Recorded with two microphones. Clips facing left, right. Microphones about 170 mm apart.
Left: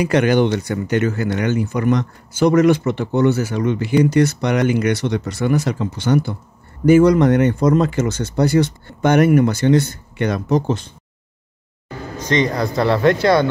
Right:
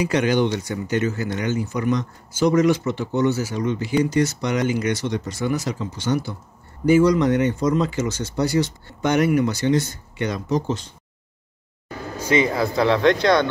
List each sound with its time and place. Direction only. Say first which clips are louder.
0.0 s speech: left 4 dB; 60° left (ahead or behind)
12.2 s speech: left 1 dB; 5° right (ahead or behind)